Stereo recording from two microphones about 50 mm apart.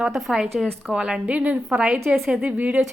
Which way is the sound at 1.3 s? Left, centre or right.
Right.